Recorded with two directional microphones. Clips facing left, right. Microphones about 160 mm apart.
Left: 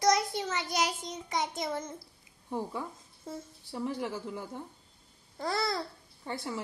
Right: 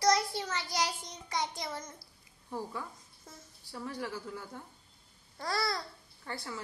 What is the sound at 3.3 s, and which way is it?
A child's voice, 20° left (ahead or behind).